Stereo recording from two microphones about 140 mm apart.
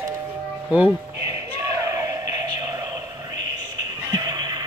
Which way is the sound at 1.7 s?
20° right (ahead or behind).